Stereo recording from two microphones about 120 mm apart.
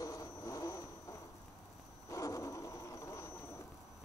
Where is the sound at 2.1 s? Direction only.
30° left (ahead or behind).